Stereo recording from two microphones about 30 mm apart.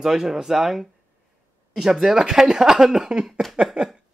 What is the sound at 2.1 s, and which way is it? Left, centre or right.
Speech, right.